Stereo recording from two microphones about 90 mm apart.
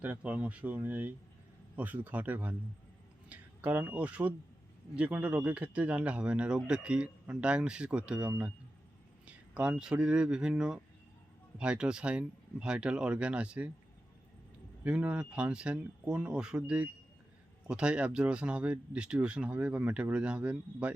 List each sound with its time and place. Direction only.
0.0 s a man's voice: 20° right (ahead or behind)
14.8 s a man's voice: 15° right (ahead or behind)